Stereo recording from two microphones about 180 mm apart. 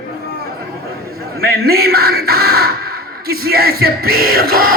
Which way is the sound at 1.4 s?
60° right (ahead or behind).